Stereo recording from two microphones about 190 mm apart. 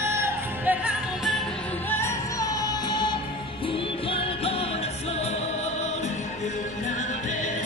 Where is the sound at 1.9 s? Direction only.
15° left (ahead or behind).